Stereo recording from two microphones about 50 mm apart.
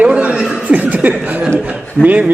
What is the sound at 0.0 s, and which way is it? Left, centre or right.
Chuckle, right.